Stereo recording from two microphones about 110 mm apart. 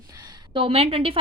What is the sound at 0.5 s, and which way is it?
Speech, 55° right (ahead or behind).